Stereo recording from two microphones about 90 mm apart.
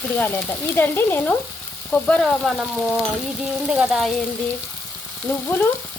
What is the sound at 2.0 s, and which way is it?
Speech, 5° left (ahead or behind).